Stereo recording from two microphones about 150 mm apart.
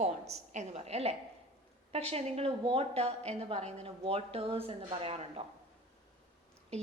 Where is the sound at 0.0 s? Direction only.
50° right (ahead or behind).